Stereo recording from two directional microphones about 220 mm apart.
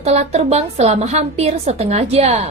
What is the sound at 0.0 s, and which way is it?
A woman's voice, 30° right (ahead or behind).